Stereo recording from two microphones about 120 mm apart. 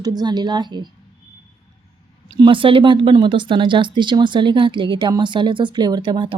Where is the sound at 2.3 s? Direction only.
45° right (ahead or behind).